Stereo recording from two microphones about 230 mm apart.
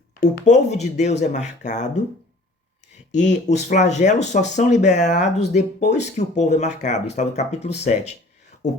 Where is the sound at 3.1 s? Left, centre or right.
Left.